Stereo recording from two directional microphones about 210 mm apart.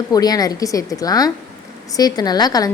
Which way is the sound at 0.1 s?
20° left (ahead or behind).